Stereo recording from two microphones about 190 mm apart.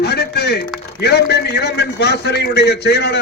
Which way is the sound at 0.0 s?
60° left (ahead or behind).